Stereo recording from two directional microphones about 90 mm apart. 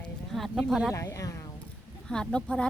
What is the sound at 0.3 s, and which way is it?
Speech, centre (ahead or behind).